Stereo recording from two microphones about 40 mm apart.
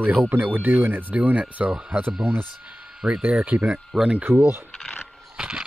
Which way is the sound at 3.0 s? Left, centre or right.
Right.